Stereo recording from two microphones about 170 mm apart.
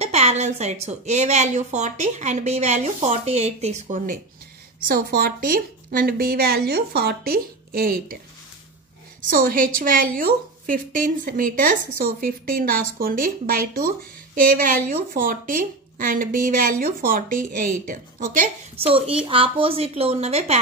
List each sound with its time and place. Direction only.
0.0 s a woman's voice: 40° right (ahead or behind); by 8.2 s 60° right (ahead or behind)
9.3 s a woman's voice: 55° right (ahead or behind)
18.8 s a woman's voice: 35° right (ahead or behind)